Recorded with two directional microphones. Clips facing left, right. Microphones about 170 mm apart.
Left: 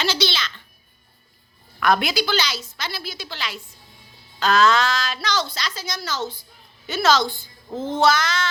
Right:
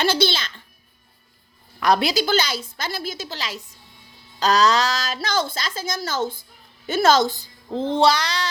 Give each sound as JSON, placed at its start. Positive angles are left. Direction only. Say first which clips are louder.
{"t": 0.0, "sound": "a woman's voice", "louder": "right 3 dB", "side_deg": -55}
{"t": 1.8, "sound": "a woman's voice", "louder": "right 1 dB", "side_deg": -35}
{"t": 7.8, "sound": "a sound", "louder": "right 1 dB", "side_deg": -30}